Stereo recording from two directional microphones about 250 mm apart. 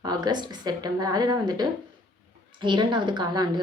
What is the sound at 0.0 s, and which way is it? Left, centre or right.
A woman's voice, centre.